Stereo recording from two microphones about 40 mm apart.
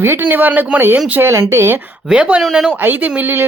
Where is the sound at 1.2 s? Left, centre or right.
Right.